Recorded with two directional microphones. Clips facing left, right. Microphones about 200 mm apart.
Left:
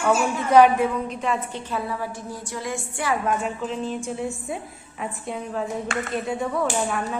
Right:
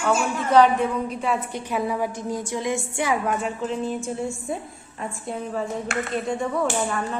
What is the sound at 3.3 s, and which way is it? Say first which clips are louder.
A woman's voice: even; centre (ahead or behind).